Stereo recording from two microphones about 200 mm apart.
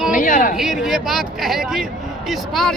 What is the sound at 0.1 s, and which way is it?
Speech, 40° left (ahead or behind).